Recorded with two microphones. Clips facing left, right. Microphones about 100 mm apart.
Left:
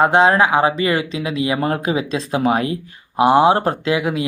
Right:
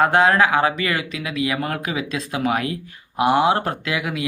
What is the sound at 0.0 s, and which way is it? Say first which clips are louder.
Speech: left 2 dB; 25° left (ahead or behind).